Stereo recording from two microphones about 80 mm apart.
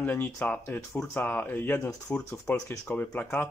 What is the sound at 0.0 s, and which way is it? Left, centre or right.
Speech, left.